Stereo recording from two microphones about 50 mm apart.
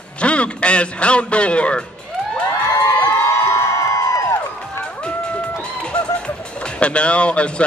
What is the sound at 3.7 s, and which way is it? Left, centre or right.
Music, left.